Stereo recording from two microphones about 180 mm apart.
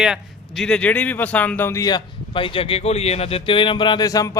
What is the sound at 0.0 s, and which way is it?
A man's voice, centre (ahead or behind).